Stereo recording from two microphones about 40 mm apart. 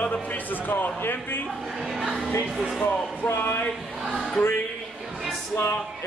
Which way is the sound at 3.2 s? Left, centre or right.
Left.